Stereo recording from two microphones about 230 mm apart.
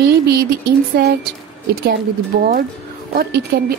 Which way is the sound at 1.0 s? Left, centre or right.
Right.